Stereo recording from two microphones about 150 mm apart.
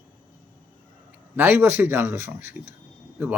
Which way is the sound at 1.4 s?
15° right (ahead or behind).